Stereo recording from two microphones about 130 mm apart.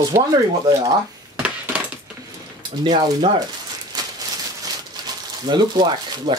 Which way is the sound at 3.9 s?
30° right (ahead or behind).